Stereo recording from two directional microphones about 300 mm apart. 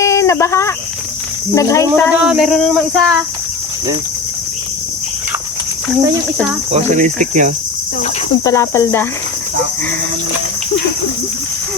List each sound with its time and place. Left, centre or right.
0.0 s cricket: centre
2.1 s a sound: centre
6.7 s cricket: right
8.0 s cricket: centre